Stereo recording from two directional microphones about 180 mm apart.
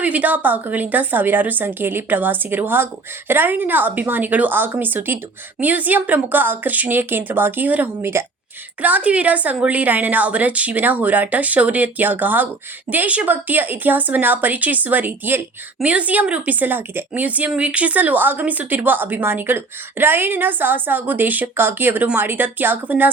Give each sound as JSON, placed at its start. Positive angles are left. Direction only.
{"t": 0.0, "sound": "a woman's voice", "side_deg": -10}